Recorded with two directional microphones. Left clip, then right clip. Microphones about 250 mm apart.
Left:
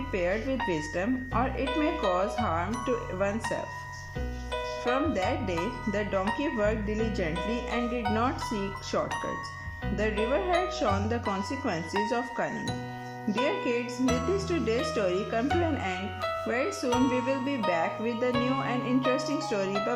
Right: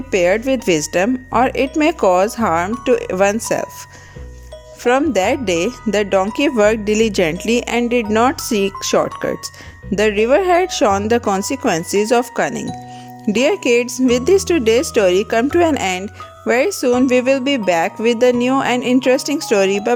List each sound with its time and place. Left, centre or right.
0.1 s wind chime: right
4.8 s wind chime: right